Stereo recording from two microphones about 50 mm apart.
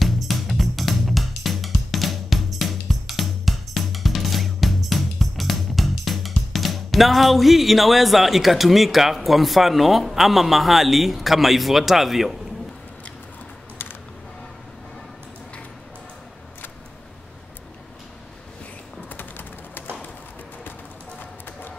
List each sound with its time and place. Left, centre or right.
0.0 s music: centre
19.0 s typing: left